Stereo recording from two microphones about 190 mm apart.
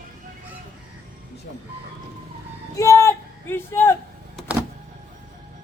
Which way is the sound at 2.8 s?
15° left (ahead or behind).